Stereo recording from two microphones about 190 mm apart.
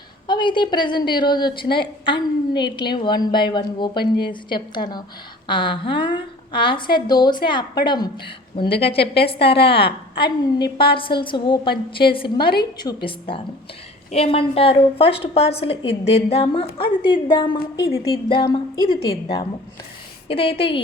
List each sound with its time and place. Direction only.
0.3 s a woman's voice: 25° left (ahead or behind)